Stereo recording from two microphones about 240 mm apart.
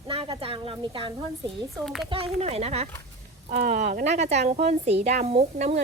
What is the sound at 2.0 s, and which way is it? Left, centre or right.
Speech, right.